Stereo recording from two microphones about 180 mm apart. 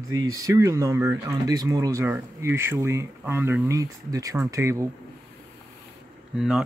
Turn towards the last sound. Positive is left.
turn(degrees=-5)  # may be behind; listen again after turning